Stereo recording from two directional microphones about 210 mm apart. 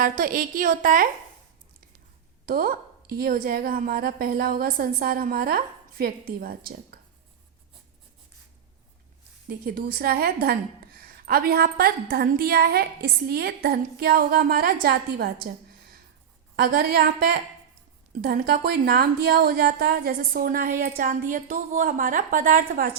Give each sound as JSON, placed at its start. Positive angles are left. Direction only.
{"t": 0.0, "sound": "a woman's voice", "side_deg": -40}
{"t": 2.5, "sound": "a woman's voice", "side_deg": -45}
{"t": 9.5, "sound": "a woman's voice", "side_deg": -45}